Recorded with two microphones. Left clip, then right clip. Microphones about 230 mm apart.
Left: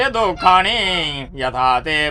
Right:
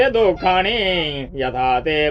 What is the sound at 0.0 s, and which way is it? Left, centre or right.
A child's voice, centre.